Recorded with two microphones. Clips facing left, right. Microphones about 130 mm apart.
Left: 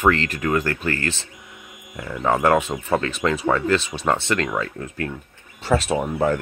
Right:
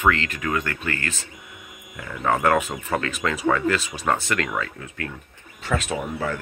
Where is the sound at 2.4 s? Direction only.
25° left (ahead or behind).